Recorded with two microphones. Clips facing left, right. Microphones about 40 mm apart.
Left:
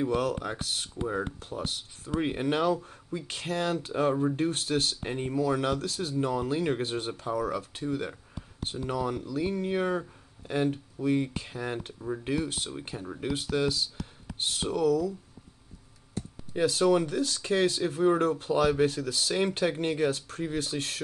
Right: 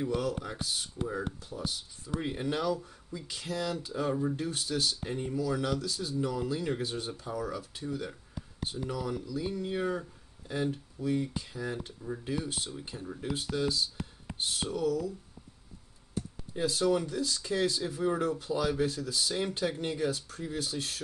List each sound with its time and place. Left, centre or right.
0.0 s speech: left
0.9 s speech: left
16.5 s speech: left